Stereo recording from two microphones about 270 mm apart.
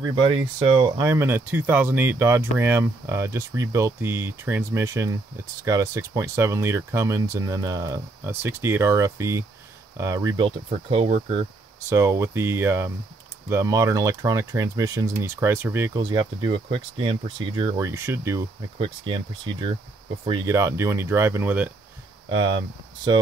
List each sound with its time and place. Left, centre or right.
0.0 s speech: centre
11.9 s speech: centre